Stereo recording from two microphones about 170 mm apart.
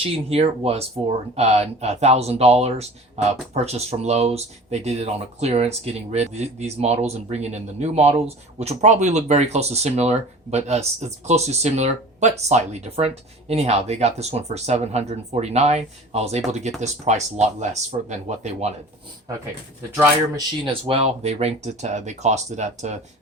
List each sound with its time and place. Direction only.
0.0 s speech: 35° right (ahead or behind)
20.8 s speech: 35° right (ahead or behind)